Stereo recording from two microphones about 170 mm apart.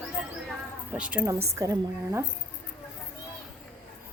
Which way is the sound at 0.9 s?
5° right (ahead or behind).